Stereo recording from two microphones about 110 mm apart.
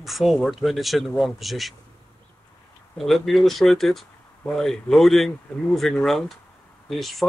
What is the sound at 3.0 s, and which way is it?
Speech, centre (ahead or behind).